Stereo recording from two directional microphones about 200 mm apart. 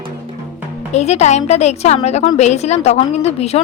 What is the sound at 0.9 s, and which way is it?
A woman's voice, 35° left (ahead or behind).